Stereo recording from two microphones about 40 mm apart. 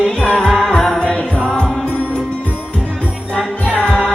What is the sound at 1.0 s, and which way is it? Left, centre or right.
Music, left.